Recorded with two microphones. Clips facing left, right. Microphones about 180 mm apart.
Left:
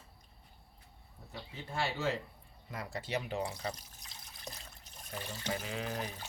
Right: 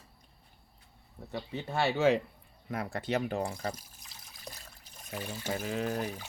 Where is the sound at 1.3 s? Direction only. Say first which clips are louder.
Right 6 dB; 70° right (ahead or behind).